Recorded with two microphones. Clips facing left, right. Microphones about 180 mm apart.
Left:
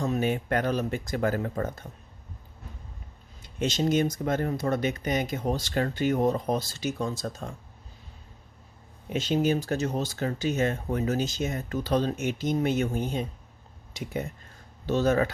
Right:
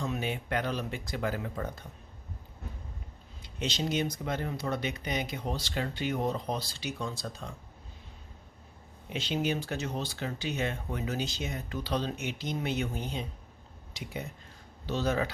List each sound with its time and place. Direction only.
0.0 s speech: 45° left (ahead or behind)
3.4 s speech: 45° left (ahead or behind)
9.0 s speech: 45° left (ahead or behind)